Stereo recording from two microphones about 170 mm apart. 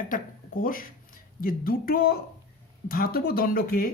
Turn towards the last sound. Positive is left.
turn(degrees=60)  # may be behind; listen again after turning